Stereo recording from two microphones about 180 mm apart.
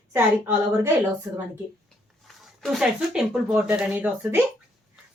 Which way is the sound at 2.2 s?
Centre (ahead or behind).